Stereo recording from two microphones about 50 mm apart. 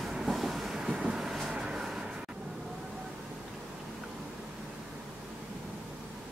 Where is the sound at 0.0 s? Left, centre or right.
Centre.